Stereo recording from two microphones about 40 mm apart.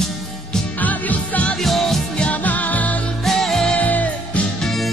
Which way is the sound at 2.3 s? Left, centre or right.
Left.